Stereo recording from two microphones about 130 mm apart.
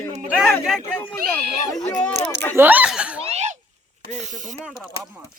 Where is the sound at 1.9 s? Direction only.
10° left (ahead or behind).